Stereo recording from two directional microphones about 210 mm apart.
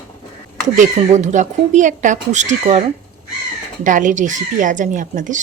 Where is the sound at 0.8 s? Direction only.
35° right (ahead or behind).